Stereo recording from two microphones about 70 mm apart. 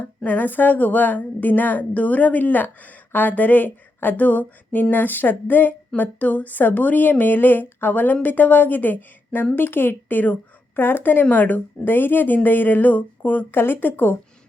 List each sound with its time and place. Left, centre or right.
0.3 s a woman's voice: left